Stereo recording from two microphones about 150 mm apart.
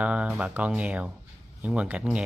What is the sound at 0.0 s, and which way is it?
Speech, 10° right (ahead or behind).